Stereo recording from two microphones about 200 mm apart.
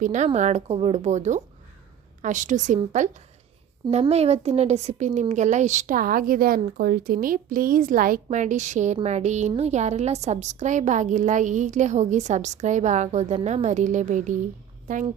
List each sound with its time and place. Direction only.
0.0 s a woman's voice: 35° right (ahead or behind)